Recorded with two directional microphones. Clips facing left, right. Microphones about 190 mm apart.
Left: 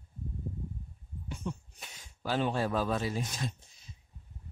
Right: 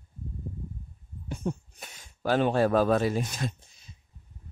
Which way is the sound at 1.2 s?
45° right (ahead or behind).